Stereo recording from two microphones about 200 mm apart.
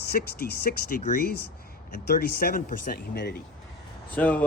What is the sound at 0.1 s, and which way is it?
Speech, 45° left (ahead or behind).